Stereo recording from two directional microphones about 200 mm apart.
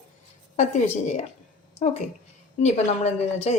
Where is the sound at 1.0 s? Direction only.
35° left (ahead or behind).